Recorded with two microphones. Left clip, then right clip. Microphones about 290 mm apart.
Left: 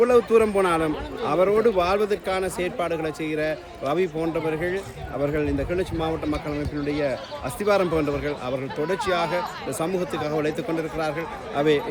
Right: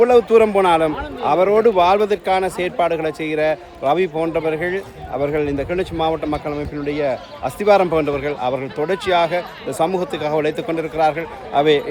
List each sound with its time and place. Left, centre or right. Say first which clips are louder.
0.0 s a man's voice: right 6 dB; centre